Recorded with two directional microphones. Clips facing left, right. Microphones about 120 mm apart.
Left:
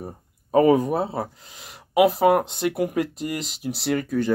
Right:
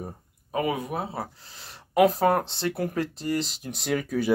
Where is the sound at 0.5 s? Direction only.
35° left (ahead or behind); by 3.3 s 10° left (ahead or behind).